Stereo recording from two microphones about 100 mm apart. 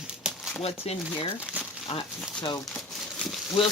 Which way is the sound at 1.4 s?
10° right (ahead or behind).